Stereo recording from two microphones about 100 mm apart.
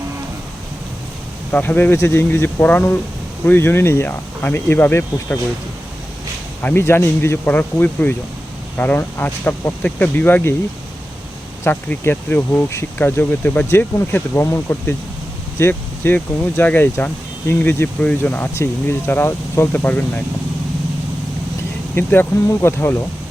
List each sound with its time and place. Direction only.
1.5 s speech: 20° left (ahead or behind)
6.6 s speech: 20° left (ahead or behind)
11.6 s speech: 20° left (ahead or behind)
21.9 s speech: 20° left (ahead or behind)